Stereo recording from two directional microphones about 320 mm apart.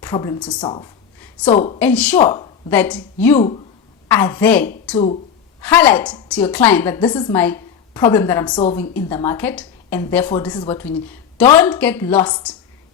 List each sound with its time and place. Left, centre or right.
0.0 s a woman's voice: centre
0.6 s a woman's voice: centre
1.8 s a woman's voice: centre
2.2 s a woman's voice: centre
2.6 s a woman's voice: centre